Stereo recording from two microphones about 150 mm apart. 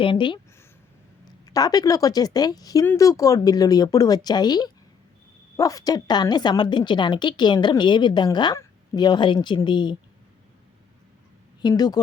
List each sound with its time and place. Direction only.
0.0 s a woman's voice: 35° left (ahead or behind)
1.5 s a woman's voice: 25° left (ahead or behind)
11.6 s speech: 25° left (ahead or behind)